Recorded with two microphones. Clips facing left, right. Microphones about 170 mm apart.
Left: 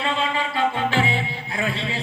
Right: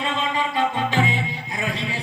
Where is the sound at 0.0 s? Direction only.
20° right (ahead or behind).